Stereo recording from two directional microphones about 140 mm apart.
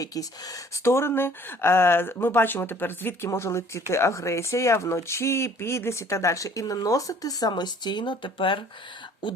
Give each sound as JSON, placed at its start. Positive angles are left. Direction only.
{"t": 0.0, "sound": "speech", "side_deg": 25}